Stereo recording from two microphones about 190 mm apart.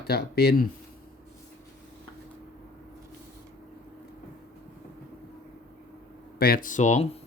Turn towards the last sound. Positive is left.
turn(degrees=40)  # may be behind; listen again after turning